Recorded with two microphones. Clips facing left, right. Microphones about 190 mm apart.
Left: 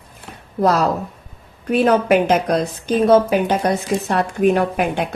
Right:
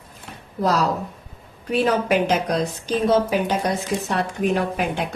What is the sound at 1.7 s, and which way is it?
A woman's voice, 55° left (ahead or behind).